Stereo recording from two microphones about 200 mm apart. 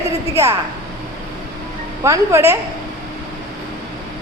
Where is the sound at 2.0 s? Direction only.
15° right (ahead or behind).